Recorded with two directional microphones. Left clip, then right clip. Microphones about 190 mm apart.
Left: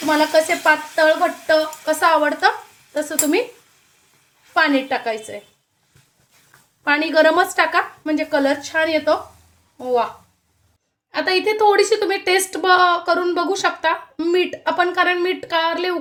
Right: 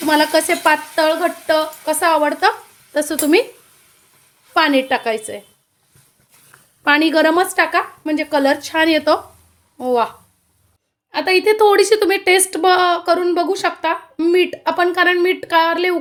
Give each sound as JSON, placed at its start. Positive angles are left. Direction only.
{"t": 0.1, "sound": "a woman's voice", "side_deg": -30}
{"t": 1.8, "sound": "a woman's voice", "side_deg": -15}
{"t": 2.9, "sound": "a woman's voice", "side_deg": -25}
{"t": 4.5, "sound": "a woman's voice", "side_deg": -25}
{"t": 6.8, "sound": "a woman's voice", "side_deg": -25}
{"t": 11.1, "sound": "a woman's voice", "side_deg": -20}